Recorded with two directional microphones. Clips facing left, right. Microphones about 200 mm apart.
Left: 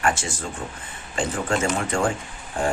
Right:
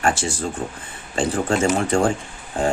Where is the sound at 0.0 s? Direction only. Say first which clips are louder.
Right 2 dB; 35° right (ahead or behind).